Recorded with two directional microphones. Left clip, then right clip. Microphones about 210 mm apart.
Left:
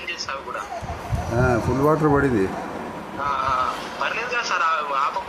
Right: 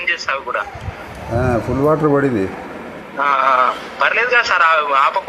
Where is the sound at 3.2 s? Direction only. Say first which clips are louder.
Right 9 dB; 15° right (ahead or behind).